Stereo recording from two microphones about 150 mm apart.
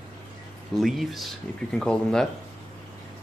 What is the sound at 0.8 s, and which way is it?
Speech, centre (ahead or behind).